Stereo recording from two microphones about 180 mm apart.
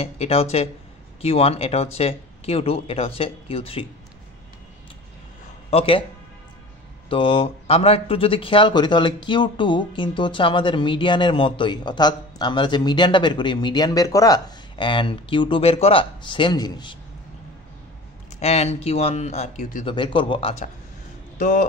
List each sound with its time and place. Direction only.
0.0 s speech: 35° left (ahead or behind)
5.7 s speech: 30° left (ahead or behind)
7.1 s speech: 30° left (ahead or behind)
18.4 s speech: 35° left (ahead or behind)
19.9 s speech: 30° left (ahead or behind)
21.4 s speech: 50° left (ahead or behind)